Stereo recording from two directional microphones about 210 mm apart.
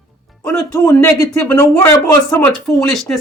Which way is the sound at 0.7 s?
15° left (ahead or behind).